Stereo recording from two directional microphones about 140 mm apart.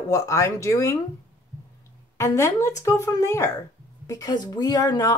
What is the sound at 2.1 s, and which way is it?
Speech, 20° left (ahead or behind).